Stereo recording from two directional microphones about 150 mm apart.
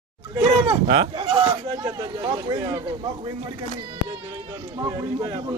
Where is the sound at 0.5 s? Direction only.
35° right (ahead or behind).